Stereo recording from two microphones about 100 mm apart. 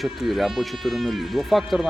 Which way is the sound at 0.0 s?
Centre (ahead or behind).